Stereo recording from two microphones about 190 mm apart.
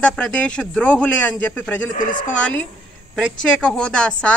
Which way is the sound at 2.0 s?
45° left (ahead or behind).